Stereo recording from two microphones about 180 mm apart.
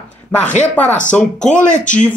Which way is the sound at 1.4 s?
45° left (ahead or behind).